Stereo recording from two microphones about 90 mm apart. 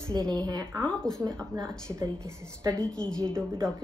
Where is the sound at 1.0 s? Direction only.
5° left (ahead or behind).